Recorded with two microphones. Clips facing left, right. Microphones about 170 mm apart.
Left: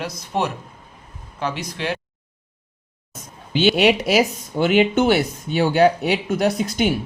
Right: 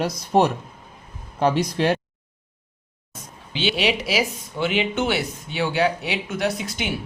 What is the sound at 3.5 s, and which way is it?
Speech, 50° left (ahead or behind).